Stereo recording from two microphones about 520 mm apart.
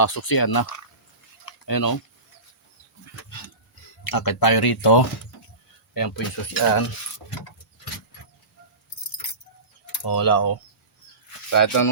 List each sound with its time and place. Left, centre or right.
0.0 s speech: left
1.5 s a sound: left
4.0 s speech: left
10.0 s speech: left